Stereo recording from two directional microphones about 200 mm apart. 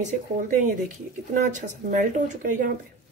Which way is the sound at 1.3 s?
40° right (ahead or behind).